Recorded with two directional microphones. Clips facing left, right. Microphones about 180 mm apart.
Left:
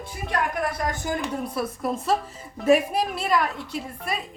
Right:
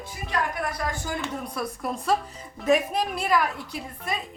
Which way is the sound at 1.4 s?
5° left (ahead or behind).